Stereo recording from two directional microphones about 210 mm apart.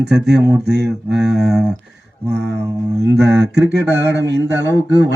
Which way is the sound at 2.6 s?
15° right (ahead or behind).